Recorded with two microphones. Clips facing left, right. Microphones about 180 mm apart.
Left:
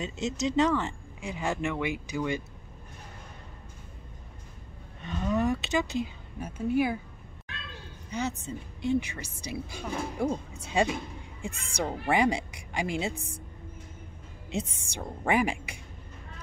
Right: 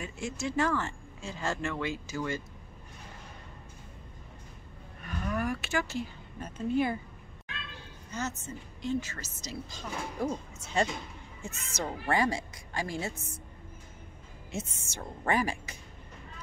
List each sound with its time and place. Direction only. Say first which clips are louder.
0.0 s a woman's voice: left 5 dB; 20° left (ahead or behind)
5.0 s a sound: left 5 dB; 25° left (ahead or behind); by 7.0 s 5° left (ahead or behind)
8.1 s a woman's voice: left 4 dB; 15° left (ahead or behind)
13.1 s a woman's voice: left 4 dB; 35° left (ahead or behind)
14.5 s a woman's voice: left 5 dB; 15° left (ahead or behind)